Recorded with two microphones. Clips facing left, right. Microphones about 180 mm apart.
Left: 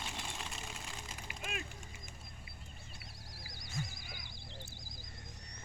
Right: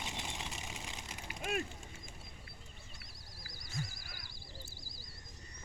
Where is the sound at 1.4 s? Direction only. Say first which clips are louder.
Right 7 dB; 45° right (ahead or behind).